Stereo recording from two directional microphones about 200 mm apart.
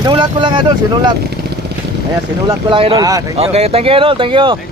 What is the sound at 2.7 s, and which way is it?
Speech, 25° right (ahead or behind).